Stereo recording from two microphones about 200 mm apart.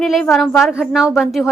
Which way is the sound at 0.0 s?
Centre (ahead or behind).